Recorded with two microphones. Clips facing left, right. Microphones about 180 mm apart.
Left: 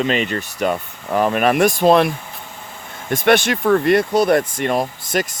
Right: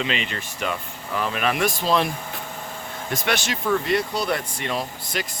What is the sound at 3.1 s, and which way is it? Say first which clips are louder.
Speech: left 10 dB; 55° left (ahead or behind).